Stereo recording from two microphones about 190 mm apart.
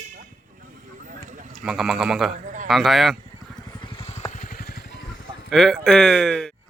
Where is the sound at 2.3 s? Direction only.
40° right (ahead or behind).